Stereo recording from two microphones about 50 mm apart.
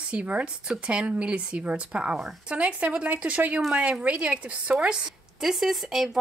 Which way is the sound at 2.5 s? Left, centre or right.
Right.